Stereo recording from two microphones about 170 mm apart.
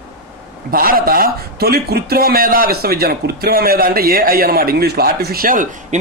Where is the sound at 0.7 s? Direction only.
60° right (ahead or behind).